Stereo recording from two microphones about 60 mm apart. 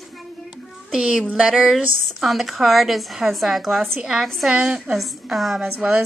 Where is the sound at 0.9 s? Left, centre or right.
Centre.